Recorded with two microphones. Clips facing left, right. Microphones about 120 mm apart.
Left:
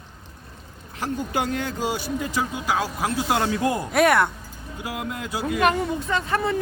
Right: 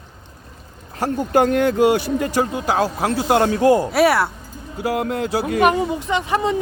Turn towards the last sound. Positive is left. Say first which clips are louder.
# right 4 dB
turn(degrees=-15)  # may be behind; listen again after turning